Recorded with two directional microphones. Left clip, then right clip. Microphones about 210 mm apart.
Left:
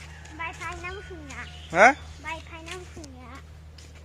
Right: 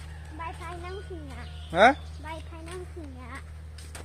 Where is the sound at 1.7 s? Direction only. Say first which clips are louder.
Left 2 dB; 15° left (ahead or behind).